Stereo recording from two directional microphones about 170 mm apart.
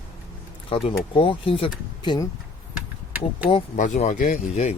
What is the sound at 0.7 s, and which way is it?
Speech, 30° left (ahead or behind).